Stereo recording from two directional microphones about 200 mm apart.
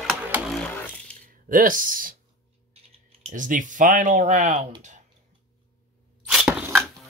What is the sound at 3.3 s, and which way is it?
Speech, 40° right (ahead or behind).